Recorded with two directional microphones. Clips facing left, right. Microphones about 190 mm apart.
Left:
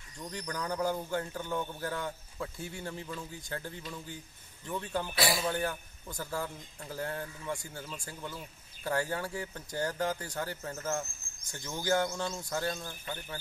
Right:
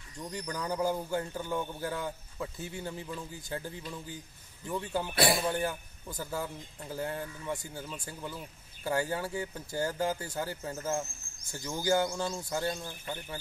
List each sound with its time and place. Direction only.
0.2 s a man's voice: 5° right (ahead or behind)
5.1 s speech: 55° right (ahead or behind)
5.6 s a man's voice: 5° right (ahead or behind)